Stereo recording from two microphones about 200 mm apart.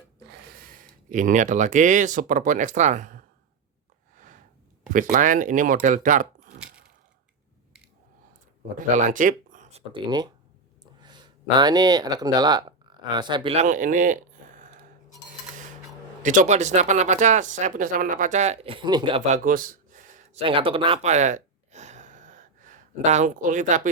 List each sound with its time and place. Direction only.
0.3 s speech: 45° right (ahead or behind)
4.1 s a sound: 40° right (ahead or behind)
5.1 s speech: 40° right (ahead or behind)
9.0 s speech: 40° right (ahead or behind)
16.2 s speech: 40° right (ahead or behind); by 19.2 s 20° right (ahead or behind)
19.3 s a sound: 45° right (ahead or behind)
20.4 s gasp: 25° right (ahead or behind)